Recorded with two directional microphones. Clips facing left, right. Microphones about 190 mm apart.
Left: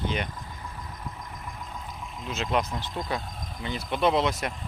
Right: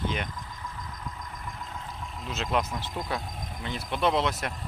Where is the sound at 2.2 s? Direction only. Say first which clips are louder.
Left 1 dB; centre (ahead or behind).